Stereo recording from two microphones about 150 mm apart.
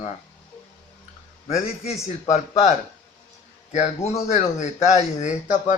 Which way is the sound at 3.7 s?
50° left (ahead or behind).